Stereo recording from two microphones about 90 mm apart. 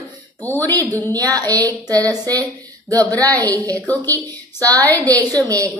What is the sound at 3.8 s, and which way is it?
Speech, 20° left (ahead or behind).